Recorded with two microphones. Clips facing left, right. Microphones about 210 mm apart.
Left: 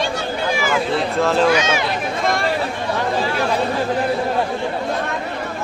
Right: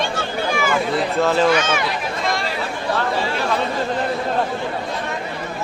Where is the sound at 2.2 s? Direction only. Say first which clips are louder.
Left 3 dB; 55° left (ahead or behind).